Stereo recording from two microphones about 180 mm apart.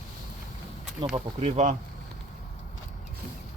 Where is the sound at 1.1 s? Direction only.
30° right (ahead or behind).